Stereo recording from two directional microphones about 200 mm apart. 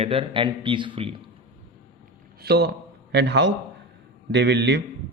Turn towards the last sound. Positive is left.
turn(degrees=-60)  # may be behind; listen again after turning